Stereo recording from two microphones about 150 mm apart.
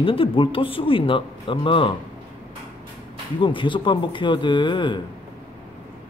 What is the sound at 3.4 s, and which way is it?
Speech, 35° left (ahead or behind).